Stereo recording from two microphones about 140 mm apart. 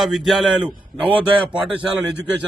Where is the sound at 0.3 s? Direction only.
5° right (ahead or behind).